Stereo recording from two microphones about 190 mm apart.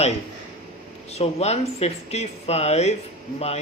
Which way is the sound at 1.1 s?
35° left (ahead or behind).